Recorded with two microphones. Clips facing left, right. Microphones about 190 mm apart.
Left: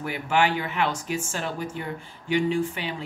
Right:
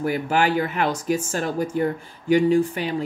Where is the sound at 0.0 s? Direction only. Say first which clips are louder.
Right 3 dB; 40° right (ahead or behind).